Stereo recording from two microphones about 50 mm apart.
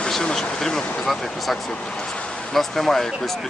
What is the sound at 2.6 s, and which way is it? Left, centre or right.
Speech, centre.